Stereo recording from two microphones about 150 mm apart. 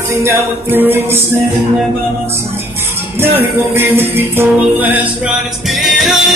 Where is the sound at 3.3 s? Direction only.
15° right (ahead or behind).